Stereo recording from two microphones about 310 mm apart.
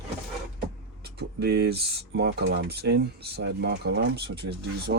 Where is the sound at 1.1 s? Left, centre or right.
Right.